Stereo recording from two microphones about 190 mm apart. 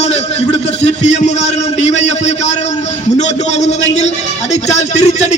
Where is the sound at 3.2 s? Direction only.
35° left (ahead or behind).